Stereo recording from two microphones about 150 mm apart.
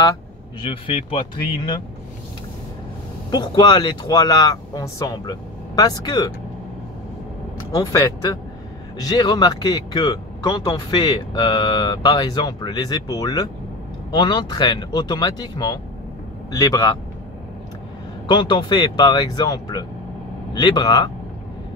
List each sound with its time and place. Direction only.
0.6 s speech: 35° left (ahead or behind)
3.3 s speech: 30° left (ahead or behind)
7.7 s speech: 25° left (ahead or behind)
18.2 s speech: 30° left (ahead or behind)